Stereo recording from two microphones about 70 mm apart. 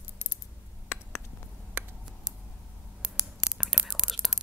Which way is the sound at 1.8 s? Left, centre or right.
Right.